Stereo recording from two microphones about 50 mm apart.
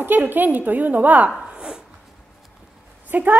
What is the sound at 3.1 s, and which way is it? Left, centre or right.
Speech, right.